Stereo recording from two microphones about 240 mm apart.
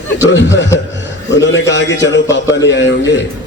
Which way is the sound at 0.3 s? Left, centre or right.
Left.